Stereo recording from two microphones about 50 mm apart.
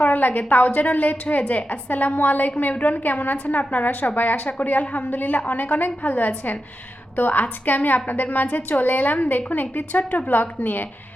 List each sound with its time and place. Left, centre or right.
0.0 s a woman's voice: left